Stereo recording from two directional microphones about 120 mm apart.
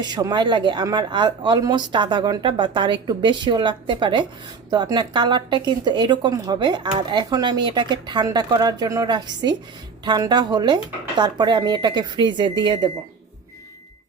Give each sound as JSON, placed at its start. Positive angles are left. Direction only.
{"t": 0.0, "sound": "speech", "side_deg": -35}